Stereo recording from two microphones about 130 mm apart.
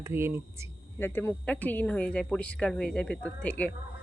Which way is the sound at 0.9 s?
15° left (ahead or behind).